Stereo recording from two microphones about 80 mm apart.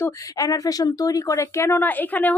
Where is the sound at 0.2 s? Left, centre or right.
Left.